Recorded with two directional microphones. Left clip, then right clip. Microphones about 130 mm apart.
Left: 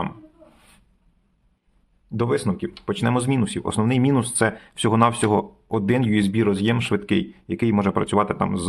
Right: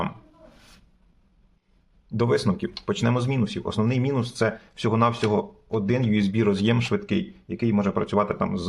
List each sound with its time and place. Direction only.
2.0 s speech: 15° left (ahead or behind)
3.0 s speech: 30° left (ahead or behind)